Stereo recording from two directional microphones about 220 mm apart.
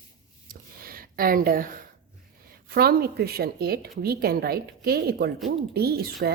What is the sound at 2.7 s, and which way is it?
A woman's voice, 45° right (ahead or behind).